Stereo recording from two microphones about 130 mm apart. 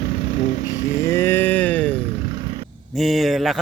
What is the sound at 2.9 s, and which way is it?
Speech, centre (ahead or behind).